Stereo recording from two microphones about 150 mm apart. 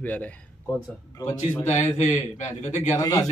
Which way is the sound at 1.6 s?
50° left (ahead or behind).